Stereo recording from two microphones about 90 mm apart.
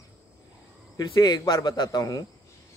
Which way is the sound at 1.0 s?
50° left (ahead or behind).